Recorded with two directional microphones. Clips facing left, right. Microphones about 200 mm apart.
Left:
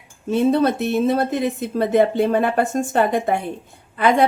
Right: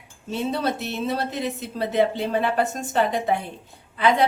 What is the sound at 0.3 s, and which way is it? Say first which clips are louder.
Speech: left 8 dB; 50° left (ahead or behind).